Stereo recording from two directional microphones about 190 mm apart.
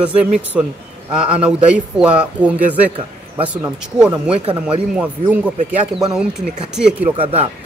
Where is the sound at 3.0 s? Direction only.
30° right (ahead or behind).